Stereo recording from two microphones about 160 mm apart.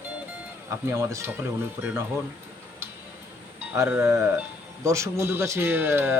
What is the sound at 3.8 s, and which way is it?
Speech, 15° right (ahead or behind).